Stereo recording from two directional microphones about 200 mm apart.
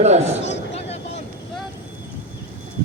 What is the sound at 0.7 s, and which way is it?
Vehicle, 30° left (ahead or behind).